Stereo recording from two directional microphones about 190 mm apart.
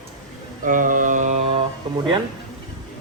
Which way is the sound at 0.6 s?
45° right (ahead or behind).